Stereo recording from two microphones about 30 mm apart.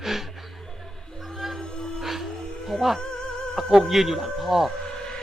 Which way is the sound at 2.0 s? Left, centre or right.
Centre.